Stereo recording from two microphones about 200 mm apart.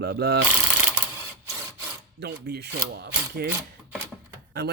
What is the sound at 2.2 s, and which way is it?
Speech, 55° right (ahead or behind).